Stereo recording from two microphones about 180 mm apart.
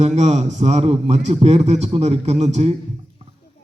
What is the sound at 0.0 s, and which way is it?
A man's voice, 35° right (ahead or behind).